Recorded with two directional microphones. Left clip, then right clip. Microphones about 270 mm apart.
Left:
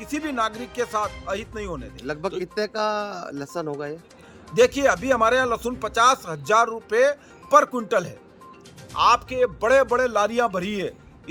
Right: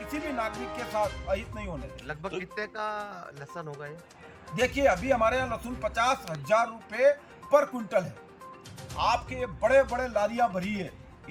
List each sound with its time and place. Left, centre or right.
0.1 s speech: centre
2.4 s speech: left
4.5 s speech: centre